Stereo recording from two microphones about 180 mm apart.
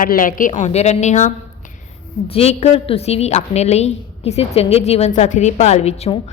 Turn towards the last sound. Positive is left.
turn(degrees=35)  # may be behind; listen again after turning